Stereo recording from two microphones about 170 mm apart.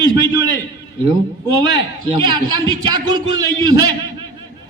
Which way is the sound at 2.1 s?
25° right (ahead or behind).